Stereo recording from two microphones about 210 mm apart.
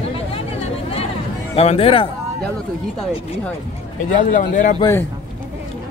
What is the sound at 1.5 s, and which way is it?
Speech, 30° left (ahead or behind).